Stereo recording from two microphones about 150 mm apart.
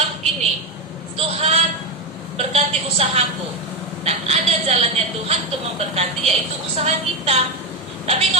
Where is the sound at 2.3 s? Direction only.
45° right (ahead or behind).